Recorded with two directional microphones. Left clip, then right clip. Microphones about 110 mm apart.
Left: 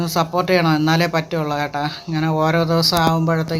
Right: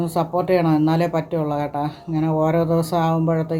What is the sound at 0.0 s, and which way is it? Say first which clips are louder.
Speech: left 2 dB; 10° right (ahead or behind).